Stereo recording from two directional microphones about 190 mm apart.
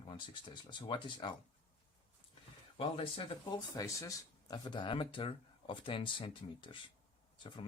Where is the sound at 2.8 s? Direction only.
30° left (ahead or behind).